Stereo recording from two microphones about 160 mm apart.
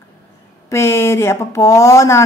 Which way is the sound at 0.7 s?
15° left (ahead or behind).